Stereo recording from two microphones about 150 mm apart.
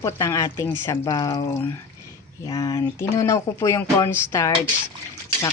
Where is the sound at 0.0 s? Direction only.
20° left (ahead or behind).